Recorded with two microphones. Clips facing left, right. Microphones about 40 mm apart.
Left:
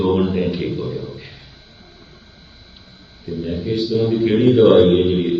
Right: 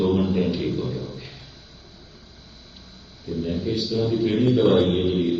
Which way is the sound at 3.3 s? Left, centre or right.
Centre.